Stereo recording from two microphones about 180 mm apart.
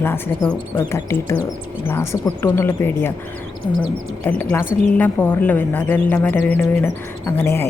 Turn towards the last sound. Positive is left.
turn(degrees=15)  # may be behind; listen again after turning